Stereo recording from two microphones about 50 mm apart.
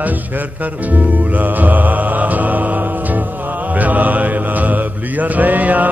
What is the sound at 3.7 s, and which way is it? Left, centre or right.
Mantra, right.